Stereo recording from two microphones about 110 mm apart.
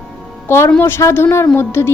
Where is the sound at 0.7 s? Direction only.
20° left (ahead or behind).